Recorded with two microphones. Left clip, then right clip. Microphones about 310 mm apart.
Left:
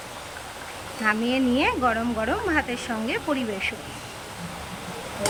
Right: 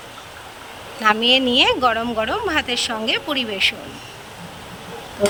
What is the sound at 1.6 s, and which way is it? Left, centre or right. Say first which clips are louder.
Speech: right 6 dB; right.